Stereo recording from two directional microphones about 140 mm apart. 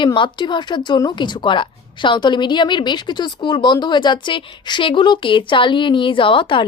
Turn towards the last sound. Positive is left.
turn(degrees=35)  # may be behind; listen again after turning